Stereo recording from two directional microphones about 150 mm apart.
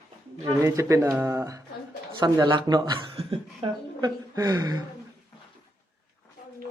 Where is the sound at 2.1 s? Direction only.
30° right (ahead or behind).